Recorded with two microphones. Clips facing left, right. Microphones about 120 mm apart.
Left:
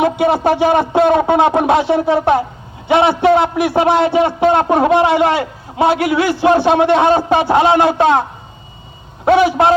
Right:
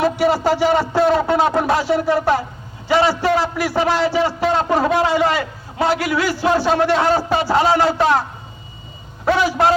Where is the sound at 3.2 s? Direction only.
60° left (ahead or behind).